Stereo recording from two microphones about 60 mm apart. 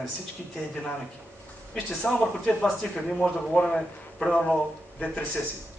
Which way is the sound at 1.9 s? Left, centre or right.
Centre.